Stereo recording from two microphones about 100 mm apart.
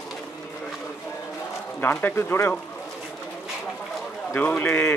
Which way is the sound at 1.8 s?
20° left (ahead or behind).